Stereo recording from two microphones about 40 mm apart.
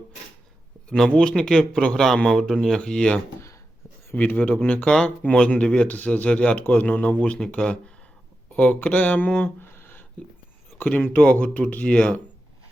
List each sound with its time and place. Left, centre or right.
0.9 s speech: centre
4.1 s speech: left
4.9 s speech: left
5.9 s speech: left
8.5 s speech: left
9.6 s a sound: left
10.8 s speech: left